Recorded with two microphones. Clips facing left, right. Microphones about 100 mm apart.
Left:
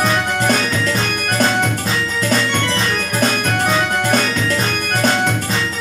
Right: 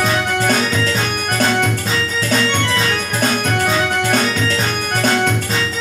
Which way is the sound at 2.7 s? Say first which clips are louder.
Right 1 dB; 35° left (ahead or behind).